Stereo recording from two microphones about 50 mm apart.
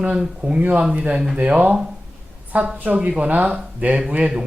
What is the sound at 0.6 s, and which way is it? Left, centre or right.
Speech, right.